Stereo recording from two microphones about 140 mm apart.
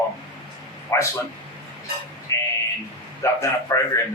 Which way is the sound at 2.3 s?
20° left (ahead or behind).